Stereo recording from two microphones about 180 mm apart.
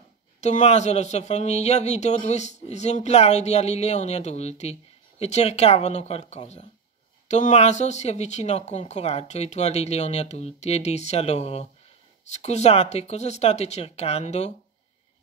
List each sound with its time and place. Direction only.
0.4 s speech: 40° left (ahead or behind)